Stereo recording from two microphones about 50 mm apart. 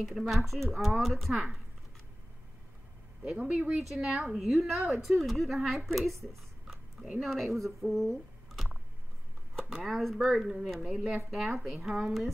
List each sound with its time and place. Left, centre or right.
0.1 s a woman's voice: centre
3.3 s speech: right
3.7 s a woman's voice: centre
9.8 s a woman's voice: centre
10.3 s a woman's voice: centre
10.6 s a woman's voice: centre
10.9 s speech: centre
11.2 s a woman's voice: centre